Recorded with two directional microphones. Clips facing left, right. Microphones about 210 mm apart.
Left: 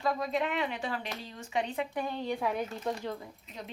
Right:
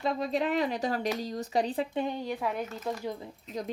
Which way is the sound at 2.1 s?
5° right (ahead or behind).